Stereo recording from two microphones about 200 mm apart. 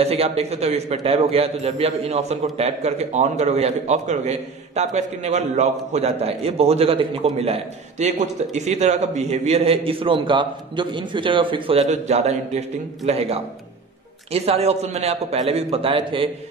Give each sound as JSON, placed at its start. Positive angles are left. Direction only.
{"t": 0.0, "sound": "a man's voice", "side_deg": -30}